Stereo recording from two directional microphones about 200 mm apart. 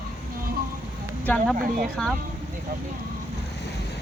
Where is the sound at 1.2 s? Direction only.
5° left (ahead or behind).